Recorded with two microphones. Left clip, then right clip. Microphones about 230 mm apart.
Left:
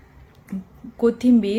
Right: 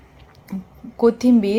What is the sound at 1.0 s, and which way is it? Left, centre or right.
Speech, centre.